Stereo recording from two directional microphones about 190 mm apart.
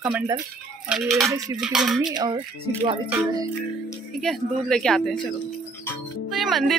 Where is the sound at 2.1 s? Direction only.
20° right (ahead or behind).